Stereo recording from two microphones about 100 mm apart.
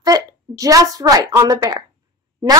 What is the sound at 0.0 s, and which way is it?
A woman's voice, 35° right (ahead or behind).